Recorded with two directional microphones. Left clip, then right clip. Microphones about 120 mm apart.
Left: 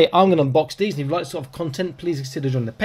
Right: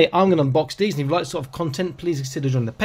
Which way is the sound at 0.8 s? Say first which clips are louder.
Right 2 dB; 60° right (ahead or behind).